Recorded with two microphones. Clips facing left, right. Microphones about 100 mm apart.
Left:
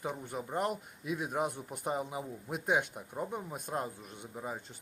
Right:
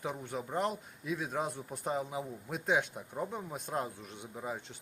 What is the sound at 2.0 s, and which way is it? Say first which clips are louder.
A man's voice: right 1 dB; centre (ahead or behind).